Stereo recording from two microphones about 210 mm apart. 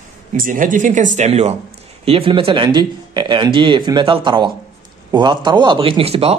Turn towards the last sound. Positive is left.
turn(degrees=-30)  # may be behind; listen again after turning